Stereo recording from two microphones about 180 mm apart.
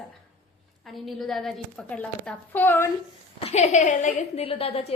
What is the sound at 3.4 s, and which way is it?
A woman's voice, 40° left (ahead or behind).